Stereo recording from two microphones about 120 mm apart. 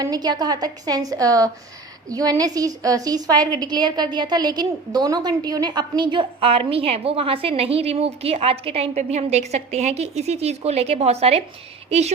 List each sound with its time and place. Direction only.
0.0 s a woman's voice: 35° right (ahead or behind); by 12.1 s 65° right (ahead or behind)